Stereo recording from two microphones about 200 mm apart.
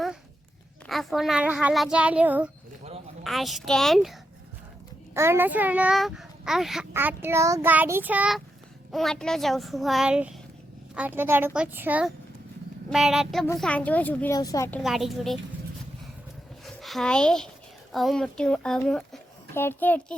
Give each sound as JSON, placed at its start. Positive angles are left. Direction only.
{"t": 0.9, "sound": "a child's voice", "side_deg": 0}
{"t": 5.1, "sound": "a child's voice", "side_deg": -10}
{"t": 6.9, "sound": "child singing", "side_deg": -10}
{"t": 8.9, "sound": "a child's voice", "side_deg": 0}
{"t": 10.9, "sound": "child singing", "side_deg": -10}
{"t": 12.9, "sound": "a child's voice", "side_deg": 0}
{"t": 14.8, "sound": "a child's voice", "side_deg": 0}
{"t": 16.6, "sound": "speech", "side_deg": 0}